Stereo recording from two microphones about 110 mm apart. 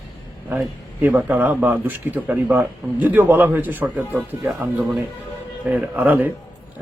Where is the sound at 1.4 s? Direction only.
15° right (ahead or behind).